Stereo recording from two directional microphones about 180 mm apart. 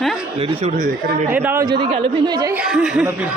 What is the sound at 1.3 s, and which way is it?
Speech, 10° right (ahead or behind).